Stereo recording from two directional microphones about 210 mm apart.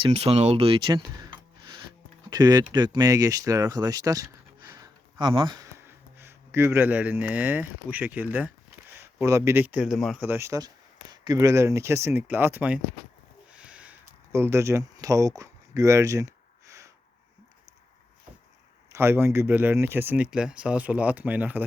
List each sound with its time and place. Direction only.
0.0 s a man's voice: 30° right (ahead or behind); by 10.2 s centre (ahead or behind)
10.2 s speech: 10° right (ahead or behind)
13.5 s a sound: 5° right (ahead or behind)
14.3 s speech: 10° right (ahead or behind)
18.9 s speech: 10° right (ahead or behind)